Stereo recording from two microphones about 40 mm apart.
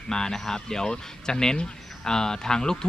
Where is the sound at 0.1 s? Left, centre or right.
Centre.